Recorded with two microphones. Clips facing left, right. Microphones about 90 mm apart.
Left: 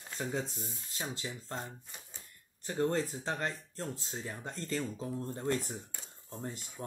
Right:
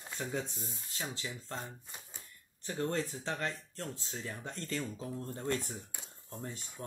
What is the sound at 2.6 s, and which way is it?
Speech, 30° left (ahead or behind).